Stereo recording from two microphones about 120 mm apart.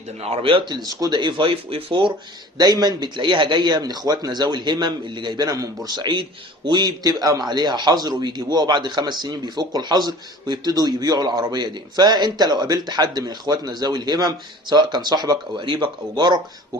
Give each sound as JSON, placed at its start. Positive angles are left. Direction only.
{"t": 0.2, "sound": "speech", "side_deg": -55}